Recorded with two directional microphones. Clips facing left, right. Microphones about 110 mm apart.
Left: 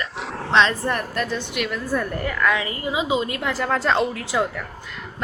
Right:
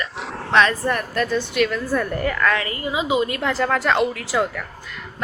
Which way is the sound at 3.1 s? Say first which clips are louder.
Right 3 dB; 20° left (ahead or behind).